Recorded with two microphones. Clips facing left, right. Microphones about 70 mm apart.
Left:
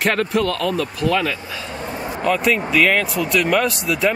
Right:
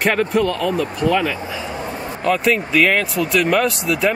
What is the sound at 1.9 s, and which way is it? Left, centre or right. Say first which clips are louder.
Speech: even; centre.